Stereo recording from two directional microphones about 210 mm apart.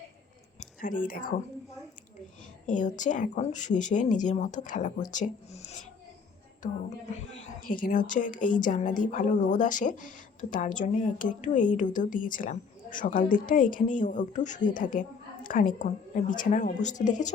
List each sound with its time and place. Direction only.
0.6 s a sound: 40° left (ahead or behind)
2.6 s a woman's voice: 35° left (ahead or behind)
7.6 s a woman's voice: 40° left (ahead or behind)